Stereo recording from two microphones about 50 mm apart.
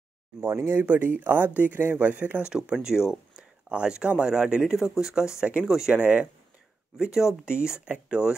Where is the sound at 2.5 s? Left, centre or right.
Centre.